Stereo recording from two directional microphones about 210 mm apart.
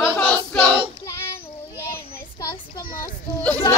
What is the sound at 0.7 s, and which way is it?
Child singing, 25° right (ahead or behind).